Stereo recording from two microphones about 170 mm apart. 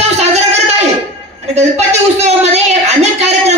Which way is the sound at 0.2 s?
40° right (ahead or behind).